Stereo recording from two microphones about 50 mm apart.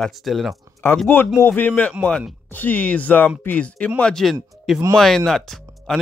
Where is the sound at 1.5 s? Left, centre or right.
Left.